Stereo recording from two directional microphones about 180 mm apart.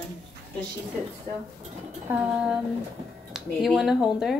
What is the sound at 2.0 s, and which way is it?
Speech, 5° right (ahead or behind).